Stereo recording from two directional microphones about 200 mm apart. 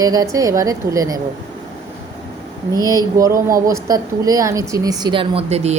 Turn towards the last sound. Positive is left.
turn(degrees=-30)  # may be behind; listen again after turning